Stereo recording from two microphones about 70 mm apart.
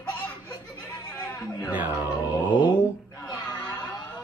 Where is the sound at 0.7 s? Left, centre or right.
Left.